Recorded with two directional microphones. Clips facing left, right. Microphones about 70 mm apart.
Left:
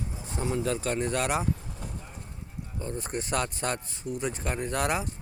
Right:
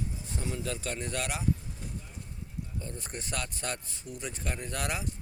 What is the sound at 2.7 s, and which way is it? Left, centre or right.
Speech, left.